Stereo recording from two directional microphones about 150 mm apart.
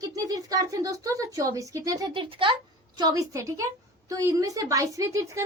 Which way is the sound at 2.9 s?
25° right (ahead or behind).